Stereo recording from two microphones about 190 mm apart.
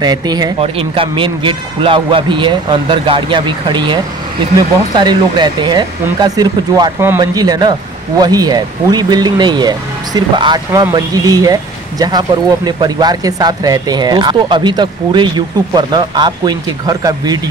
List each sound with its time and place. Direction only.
0.0 s speech: 20° right (ahead or behind)